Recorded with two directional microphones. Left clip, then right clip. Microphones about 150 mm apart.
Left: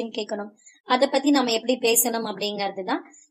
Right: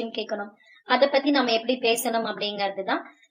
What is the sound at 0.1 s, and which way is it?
A woman's voice, 50° left (ahead or behind).